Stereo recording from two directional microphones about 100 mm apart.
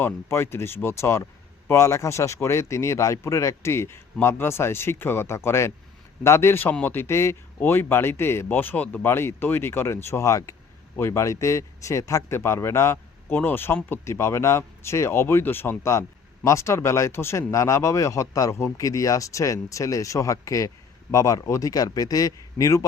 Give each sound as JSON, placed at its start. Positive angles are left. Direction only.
{"t": 0.0, "sound": "speech", "side_deg": 25}